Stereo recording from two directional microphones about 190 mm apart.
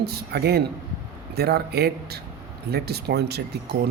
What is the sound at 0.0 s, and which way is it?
Speech, 55° right (ahead or behind).